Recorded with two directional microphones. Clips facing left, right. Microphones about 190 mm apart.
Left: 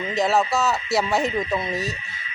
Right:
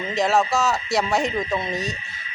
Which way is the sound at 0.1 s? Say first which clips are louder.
Right 1 dB; centre (ahead or behind).